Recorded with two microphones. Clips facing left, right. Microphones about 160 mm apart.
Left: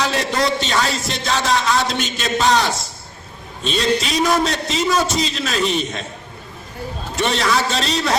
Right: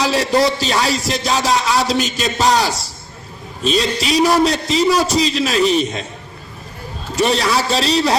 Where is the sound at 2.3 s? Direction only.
35° right (ahead or behind).